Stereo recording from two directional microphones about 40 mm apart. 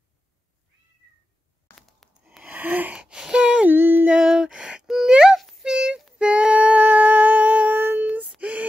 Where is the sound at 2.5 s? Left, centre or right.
Right.